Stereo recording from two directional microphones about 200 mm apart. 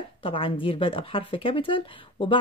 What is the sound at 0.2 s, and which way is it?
Speech, 25° left (ahead or behind).